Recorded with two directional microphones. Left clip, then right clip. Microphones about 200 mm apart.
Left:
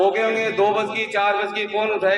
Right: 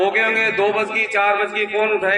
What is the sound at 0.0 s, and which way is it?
A man's voice, 35° left (ahead or behind).